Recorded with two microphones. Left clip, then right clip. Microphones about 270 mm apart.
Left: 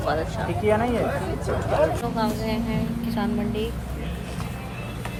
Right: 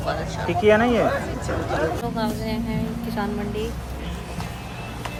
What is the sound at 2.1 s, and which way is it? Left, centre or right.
A woman's voice, centre.